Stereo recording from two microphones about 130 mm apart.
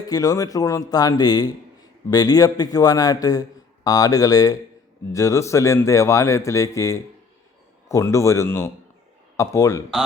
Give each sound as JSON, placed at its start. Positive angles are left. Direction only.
{"t": 0.1, "sound": "a man's voice", "side_deg": 25}